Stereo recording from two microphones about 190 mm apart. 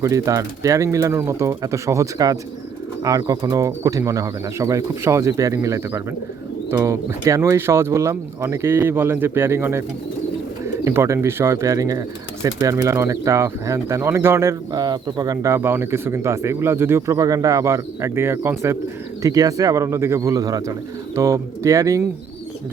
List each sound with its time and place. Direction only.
0.0 s speech: 15° right (ahead or behind)
10.8 s speech: 15° right (ahead or behind)